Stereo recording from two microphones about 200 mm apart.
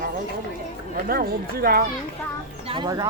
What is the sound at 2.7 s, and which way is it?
Speech, 20° right (ahead or behind).